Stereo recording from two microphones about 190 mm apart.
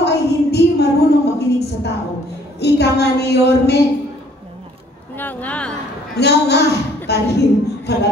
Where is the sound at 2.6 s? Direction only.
60° left (ahead or behind).